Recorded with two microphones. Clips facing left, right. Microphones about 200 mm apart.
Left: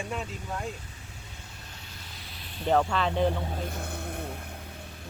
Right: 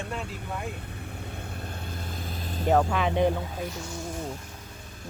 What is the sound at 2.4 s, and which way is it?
Vehicle, 45° right (ahead or behind).